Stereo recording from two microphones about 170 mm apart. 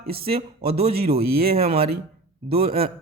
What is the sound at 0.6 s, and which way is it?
Speech, 65° right (ahead or behind).